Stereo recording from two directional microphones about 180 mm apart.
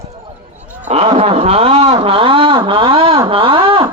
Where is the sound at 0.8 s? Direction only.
35° right (ahead or behind).